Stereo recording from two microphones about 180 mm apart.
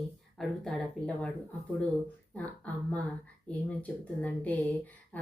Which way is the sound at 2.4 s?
10° left (ahead or behind).